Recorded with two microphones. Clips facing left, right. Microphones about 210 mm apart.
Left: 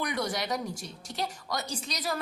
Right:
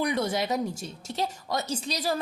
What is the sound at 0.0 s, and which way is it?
A woman's voice, 25° right (ahead or behind).